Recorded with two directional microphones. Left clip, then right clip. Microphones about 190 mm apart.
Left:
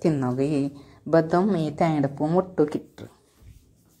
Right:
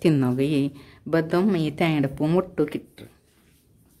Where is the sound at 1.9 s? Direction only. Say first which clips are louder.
Even; 25° right (ahead or behind).